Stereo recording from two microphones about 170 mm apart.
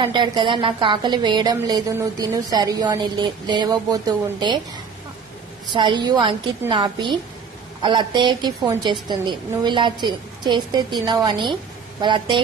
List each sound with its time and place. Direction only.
0.0 s a woman's voice: 25° right (ahead or behind)
5.7 s a woman's voice: 25° right (ahead or behind)